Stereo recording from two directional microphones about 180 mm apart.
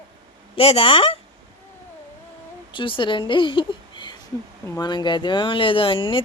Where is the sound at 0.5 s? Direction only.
30° left (ahead or behind).